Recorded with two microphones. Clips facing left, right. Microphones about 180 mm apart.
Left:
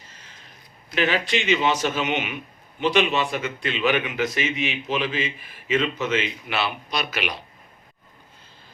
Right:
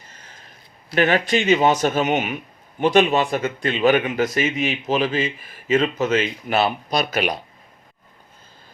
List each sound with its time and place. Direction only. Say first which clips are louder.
0.9 s speech: right 5 dB; 50° right (ahead or behind)